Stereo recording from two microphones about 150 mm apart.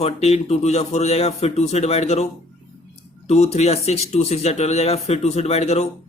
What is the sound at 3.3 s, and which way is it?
A man's voice, 45° left (ahead or behind).